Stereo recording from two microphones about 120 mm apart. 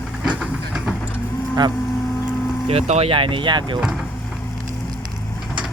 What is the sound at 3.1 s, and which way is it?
Speech, 45° right (ahead or behind).